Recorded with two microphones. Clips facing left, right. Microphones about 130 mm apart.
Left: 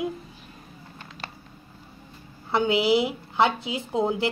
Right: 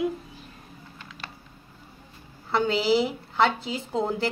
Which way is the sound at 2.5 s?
15° left (ahead or behind).